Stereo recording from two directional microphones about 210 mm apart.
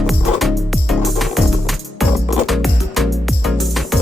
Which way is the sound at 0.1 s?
Centre (ahead or behind).